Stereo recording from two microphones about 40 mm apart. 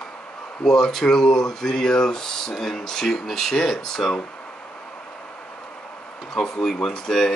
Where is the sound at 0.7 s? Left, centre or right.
Centre.